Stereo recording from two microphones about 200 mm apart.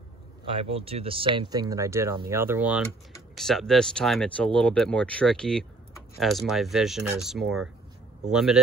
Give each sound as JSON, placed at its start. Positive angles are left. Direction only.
{"t": 0.5, "sound": "speech", "side_deg": -30}